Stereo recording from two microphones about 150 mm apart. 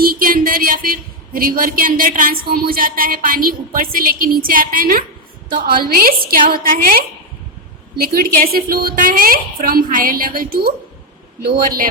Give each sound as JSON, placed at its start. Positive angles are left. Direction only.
{"t": 0.0, "sound": "a man's voice", "side_deg": -75}
{"t": 7.9, "sound": "a woman's voice", "side_deg": -85}